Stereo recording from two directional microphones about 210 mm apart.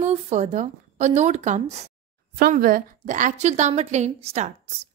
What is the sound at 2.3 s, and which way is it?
A woman's voice, 45° right (ahead or behind).